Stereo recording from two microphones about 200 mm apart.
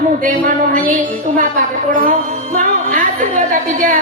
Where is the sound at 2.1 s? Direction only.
40° right (ahead or behind).